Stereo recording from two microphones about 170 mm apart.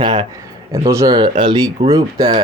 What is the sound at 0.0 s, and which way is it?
Speech, 25° right (ahead or behind).